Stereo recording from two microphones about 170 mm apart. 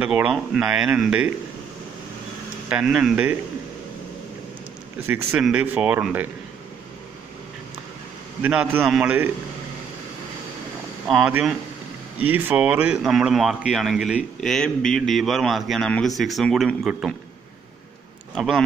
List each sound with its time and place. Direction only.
0.0 s speech: 5° right (ahead or behind)
2.7 s a man's voice: 5° right (ahead or behind)
5.0 s speech: 10° right (ahead or behind)
8.4 s speech: 10° right (ahead or behind)
11.1 s a man's voice: centre (ahead or behind)
12.3 s a man's voice: 10° right (ahead or behind)
18.3 s a man's voice: centre (ahead or behind)